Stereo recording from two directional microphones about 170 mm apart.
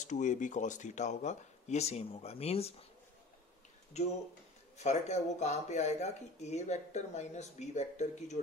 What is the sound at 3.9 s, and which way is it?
Speech, 40° left (ahead or behind).